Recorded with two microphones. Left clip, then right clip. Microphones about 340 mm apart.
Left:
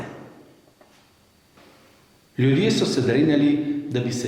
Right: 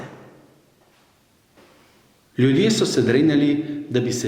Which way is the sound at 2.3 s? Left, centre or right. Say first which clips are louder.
Right 2 dB; right.